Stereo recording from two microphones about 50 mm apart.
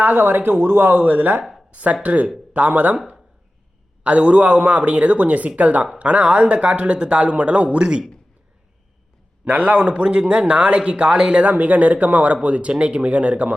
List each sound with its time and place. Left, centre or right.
0.0 s speech: right
4.0 s speech: right
9.5 s speech: right